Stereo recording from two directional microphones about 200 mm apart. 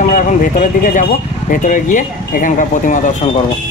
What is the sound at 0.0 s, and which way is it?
Speech, 40° left (ahead or behind).